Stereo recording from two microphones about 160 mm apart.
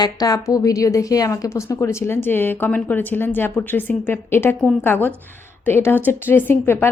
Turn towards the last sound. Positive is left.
turn(degrees=15)  # may be behind; listen again after turning